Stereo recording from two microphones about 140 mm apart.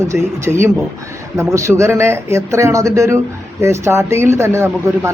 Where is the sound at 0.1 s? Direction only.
20° right (ahead or behind).